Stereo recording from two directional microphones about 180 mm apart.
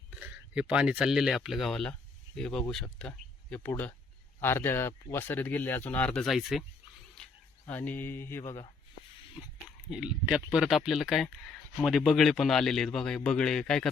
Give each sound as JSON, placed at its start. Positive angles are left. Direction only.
{"t": 0.1, "sound": "speech", "side_deg": -5}
{"t": 7.6, "sound": "speech", "side_deg": 10}
{"t": 9.9, "sound": "speech", "side_deg": -5}